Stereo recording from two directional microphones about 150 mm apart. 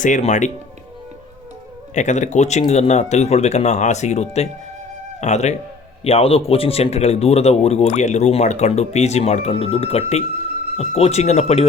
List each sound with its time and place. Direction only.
0.0 s speech: 55° left (ahead or behind)
2.0 s speech: 55° left (ahead or behind)